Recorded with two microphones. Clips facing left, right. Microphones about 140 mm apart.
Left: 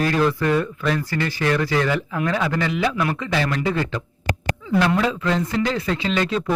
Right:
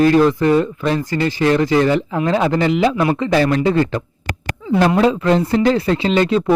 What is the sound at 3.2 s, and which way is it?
Speech, 40° right (ahead or behind).